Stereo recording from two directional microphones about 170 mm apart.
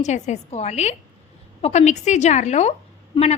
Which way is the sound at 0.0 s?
45° left (ahead or behind).